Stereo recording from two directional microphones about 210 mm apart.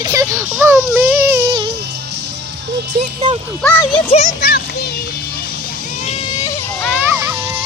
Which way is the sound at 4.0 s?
30° left (ahead or behind).